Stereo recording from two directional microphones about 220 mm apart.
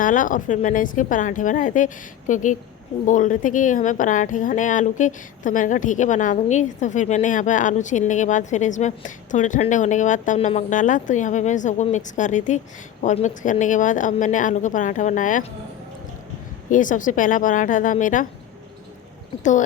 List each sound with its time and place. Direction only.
0.0 s a woman's voice: 35° left (ahead or behind)
16.6 s a woman's voice: 35° left (ahead or behind)
19.4 s a woman's voice: 35° left (ahead or behind)